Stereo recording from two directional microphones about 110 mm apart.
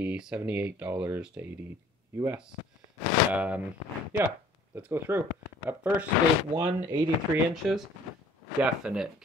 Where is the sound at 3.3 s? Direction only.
10° right (ahead or behind).